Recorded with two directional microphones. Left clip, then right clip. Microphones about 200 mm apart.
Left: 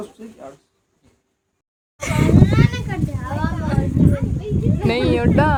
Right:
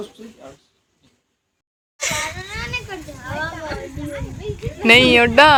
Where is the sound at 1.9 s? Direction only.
25° left (ahead or behind).